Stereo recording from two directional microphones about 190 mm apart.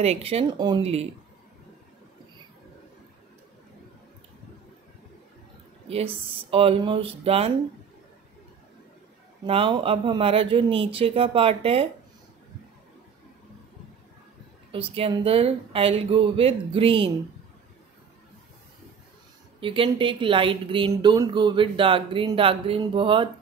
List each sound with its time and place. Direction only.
0.0 s speech: 30° right (ahead or behind)
0.6 s a woman's voice: 20° right (ahead or behind)
6.2 s a woman's voice: 30° right (ahead or behind)
9.5 s a woman's voice: 25° right (ahead or behind)
14.7 s a woman's voice: 30° right (ahead or behind)
19.6 s a woman's voice: 25° right (ahead or behind)